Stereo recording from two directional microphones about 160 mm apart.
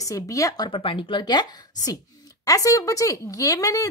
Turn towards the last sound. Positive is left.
turn(degrees=20)  # may be behind; listen again after turning